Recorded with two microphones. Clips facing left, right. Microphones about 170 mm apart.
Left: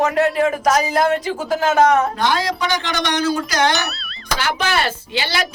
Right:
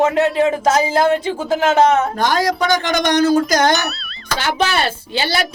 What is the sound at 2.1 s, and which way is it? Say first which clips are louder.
Speech: right 3 dB; 45° right (ahead or behind).